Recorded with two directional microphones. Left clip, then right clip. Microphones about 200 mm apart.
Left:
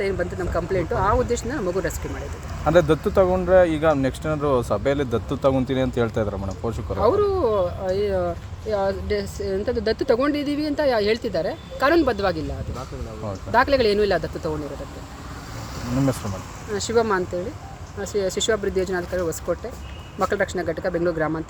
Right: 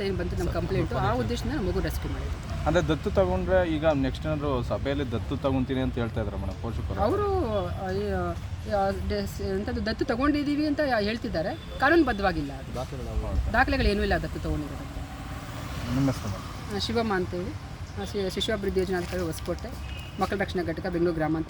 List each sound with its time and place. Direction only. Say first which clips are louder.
0.0 s speech: left 6 dB; centre (ahead or behind)
2.6 s speech: left 8 dB; 45° left (ahead or behind)
7.0 s speech: left 7 dB; 5° left (ahead or behind)
13.5 s speech: left 7 dB; 5° left (ahead or behind)
16.7 s speech: left 7 dB; 5° left (ahead or behind)